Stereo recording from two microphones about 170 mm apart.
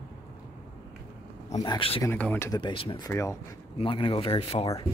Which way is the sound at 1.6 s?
30° left (ahead or behind).